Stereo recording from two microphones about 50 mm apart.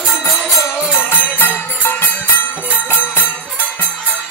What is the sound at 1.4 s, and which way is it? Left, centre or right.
Music, left.